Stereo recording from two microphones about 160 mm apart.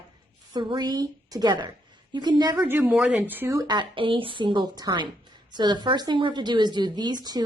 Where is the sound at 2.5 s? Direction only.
10° right (ahead or behind).